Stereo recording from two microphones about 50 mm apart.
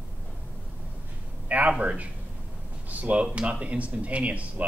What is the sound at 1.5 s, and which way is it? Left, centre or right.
A man's voice, right.